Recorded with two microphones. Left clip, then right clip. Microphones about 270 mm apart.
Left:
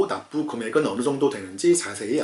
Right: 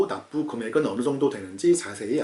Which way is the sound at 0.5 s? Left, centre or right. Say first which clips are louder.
Left 2 dB; centre.